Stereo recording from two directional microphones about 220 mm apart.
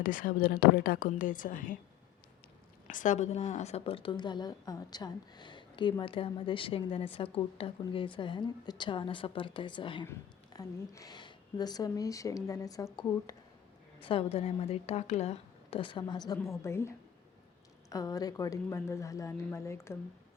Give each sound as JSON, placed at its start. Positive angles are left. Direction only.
{"t": 0.0, "sound": "a woman's voice", "side_deg": 40}
{"t": 2.8, "sound": "a woman's voice", "side_deg": 35}
{"t": 14.0, "sound": "a woman's voice", "side_deg": 25}